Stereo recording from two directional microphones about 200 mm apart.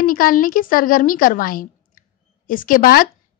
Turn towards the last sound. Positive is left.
turn(degrees=45)  # may be behind; listen again after turning